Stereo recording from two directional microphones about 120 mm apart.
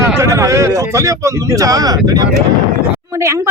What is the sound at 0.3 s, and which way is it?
Speech, 25° right (ahead or behind).